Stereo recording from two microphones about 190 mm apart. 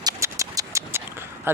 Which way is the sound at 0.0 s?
15° right (ahead or behind).